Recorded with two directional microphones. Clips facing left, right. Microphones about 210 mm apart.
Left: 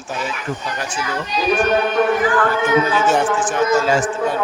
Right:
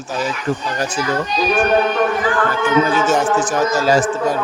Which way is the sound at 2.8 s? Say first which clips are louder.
Right 1 dB; 40° right (ahead or behind).